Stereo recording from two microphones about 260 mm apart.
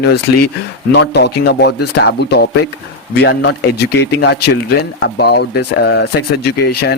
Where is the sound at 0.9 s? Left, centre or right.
Left.